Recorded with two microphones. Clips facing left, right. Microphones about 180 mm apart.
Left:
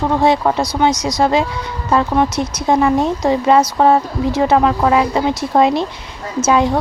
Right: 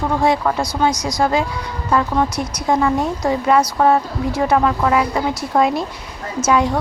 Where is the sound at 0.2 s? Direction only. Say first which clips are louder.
Left 3 dB; 25° left (ahead or behind).